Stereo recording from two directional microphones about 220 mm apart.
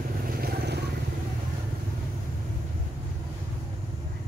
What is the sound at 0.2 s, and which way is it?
Vehicle, 40° right (ahead or behind).